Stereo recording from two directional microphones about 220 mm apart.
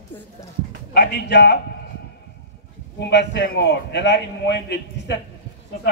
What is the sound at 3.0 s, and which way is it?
A man's voice, 50° left (ahead or behind).